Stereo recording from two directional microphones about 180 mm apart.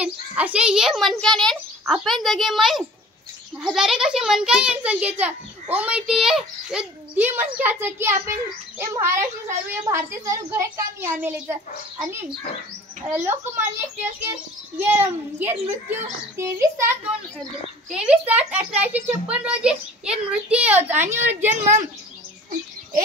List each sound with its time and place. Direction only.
0.0 s a child's voice: 5° right (ahead or behind)
17.9 s a child's voice: 5° right (ahead or behind)